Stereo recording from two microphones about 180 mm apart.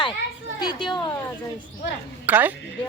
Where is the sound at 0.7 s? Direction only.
25° left (ahead or behind).